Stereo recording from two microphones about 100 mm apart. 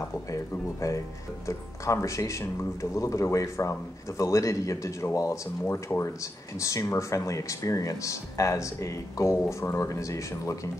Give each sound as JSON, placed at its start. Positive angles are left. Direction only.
{"t": 0.3, "sound": "speech", "side_deg": 35}